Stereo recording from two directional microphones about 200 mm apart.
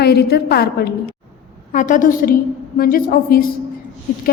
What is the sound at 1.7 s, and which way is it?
A woman's voice, 40° left (ahead or behind).